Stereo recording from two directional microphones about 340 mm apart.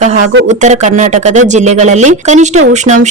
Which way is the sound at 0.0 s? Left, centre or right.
Right.